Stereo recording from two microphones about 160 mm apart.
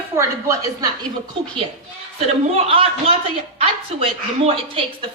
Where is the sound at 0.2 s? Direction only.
20° right (ahead or behind).